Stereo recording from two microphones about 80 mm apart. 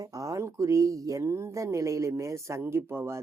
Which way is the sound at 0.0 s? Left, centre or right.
Right.